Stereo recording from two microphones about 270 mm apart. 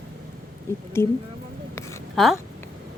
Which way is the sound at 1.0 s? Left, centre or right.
Centre.